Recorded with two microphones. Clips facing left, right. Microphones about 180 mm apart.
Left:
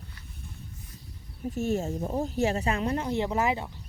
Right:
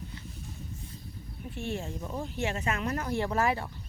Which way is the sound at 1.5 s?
40° left (ahead or behind).